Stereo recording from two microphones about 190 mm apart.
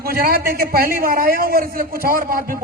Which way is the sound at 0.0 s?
55° right (ahead or behind).